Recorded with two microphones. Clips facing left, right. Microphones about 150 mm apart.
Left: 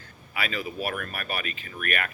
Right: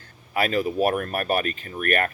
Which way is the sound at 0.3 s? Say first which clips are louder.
Right 9 dB; 45° right (ahead or behind).